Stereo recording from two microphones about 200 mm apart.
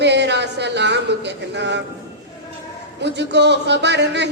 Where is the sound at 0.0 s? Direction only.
60° right (ahead or behind).